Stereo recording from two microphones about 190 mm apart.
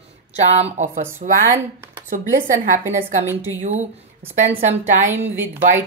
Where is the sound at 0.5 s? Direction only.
40° right (ahead or behind).